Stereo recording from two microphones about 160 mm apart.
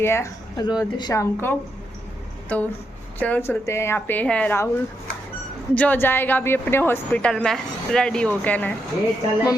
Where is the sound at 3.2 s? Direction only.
10° left (ahead or behind).